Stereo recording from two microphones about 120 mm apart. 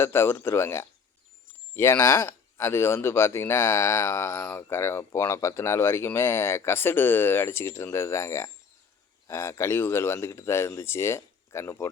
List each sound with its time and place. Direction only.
0.0 s speech: 20° left (ahead or behind)